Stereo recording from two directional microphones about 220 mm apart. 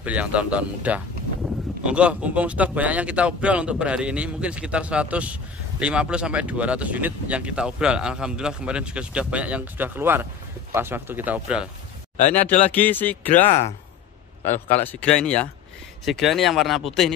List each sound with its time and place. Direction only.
0.0 s speech: 5° right (ahead or behind)
12.2 s speech: 35° left (ahead or behind)
12.6 s speech: 5° left (ahead or behind)
13.5 s speech: 30° left (ahead or behind)
14.4 s speech: 10° left (ahead or behind)